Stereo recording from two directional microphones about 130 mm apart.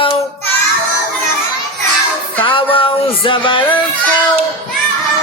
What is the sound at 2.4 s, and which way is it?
Speech, 45° left (ahead or behind).